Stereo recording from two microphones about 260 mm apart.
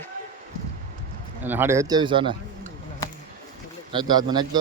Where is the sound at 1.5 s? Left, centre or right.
Centre.